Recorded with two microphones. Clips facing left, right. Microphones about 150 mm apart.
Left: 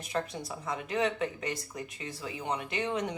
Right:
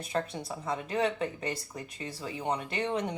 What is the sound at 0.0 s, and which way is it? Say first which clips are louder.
A woman's voice: right 1 dB; 30° right (ahead or behind).